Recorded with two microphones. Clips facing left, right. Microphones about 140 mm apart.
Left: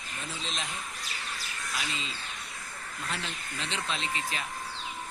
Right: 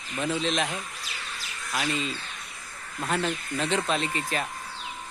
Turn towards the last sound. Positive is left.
turn(degrees=-50)  # may be behind; listen again after turning